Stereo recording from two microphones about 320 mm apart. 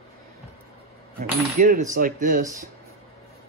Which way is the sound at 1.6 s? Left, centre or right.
Right.